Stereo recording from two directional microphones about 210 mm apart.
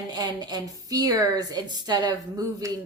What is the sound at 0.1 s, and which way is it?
A woman's voice, 20° right (ahead or behind).